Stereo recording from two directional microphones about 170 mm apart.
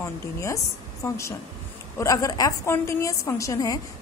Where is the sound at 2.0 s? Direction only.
20° left (ahead or behind).